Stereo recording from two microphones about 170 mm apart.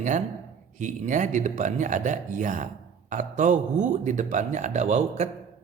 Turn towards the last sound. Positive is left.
turn(degrees=-40)  # may be behind; listen again after turning